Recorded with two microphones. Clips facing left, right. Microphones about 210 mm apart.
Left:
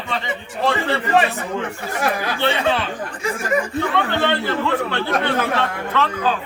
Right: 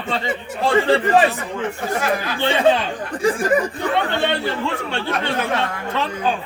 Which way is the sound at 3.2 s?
30° right (ahead or behind).